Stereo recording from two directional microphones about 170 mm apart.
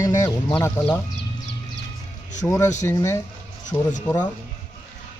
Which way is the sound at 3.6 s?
45° left (ahead or behind).